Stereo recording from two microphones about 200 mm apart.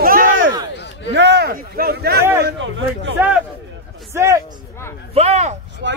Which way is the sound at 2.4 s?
65° right (ahead or behind).